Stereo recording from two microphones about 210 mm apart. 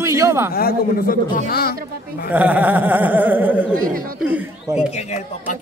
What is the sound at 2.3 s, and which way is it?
Speech, 5° right (ahead or behind).